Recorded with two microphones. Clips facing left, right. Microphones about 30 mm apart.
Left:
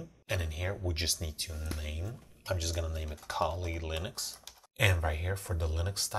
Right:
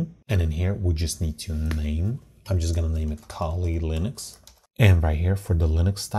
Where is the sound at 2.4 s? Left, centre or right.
Centre.